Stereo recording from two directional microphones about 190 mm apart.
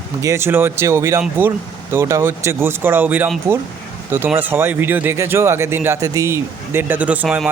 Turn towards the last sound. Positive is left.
turn(degrees=-10)  # may be behind; listen again after turning